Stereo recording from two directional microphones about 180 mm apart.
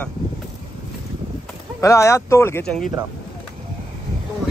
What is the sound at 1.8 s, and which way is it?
Speech, 15° left (ahead or behind).